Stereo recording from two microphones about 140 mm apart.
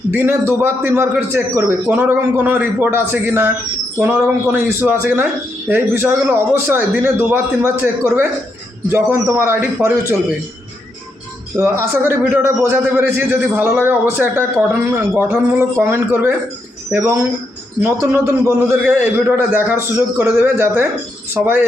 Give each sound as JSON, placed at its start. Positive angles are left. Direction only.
{"t": 0.1, "sound": "a man's voice", "side_deg": -15}
{"t": 11.5, "sound": "a man's voice", "side_deg": -20}